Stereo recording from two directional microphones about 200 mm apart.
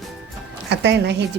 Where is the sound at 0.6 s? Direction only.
55° right (ahead or behind).